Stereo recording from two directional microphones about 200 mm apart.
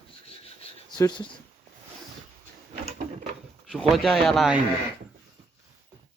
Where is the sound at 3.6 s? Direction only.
Centre (ahead or behind).